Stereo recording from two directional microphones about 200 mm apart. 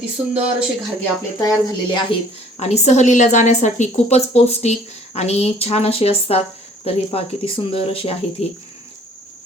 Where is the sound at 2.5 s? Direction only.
35° left (ahead or behind).